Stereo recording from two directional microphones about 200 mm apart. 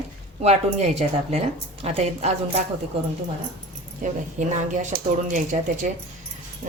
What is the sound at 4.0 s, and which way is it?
Speech, 40° right (ahead or behind).